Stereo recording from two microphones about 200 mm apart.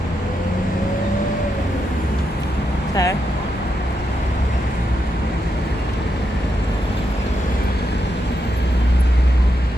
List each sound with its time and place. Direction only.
2.9 s speech: 15° left (ahead or behind)